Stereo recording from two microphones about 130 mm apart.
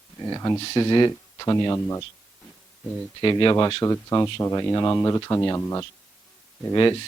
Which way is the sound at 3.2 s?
35° left (ahead or behind).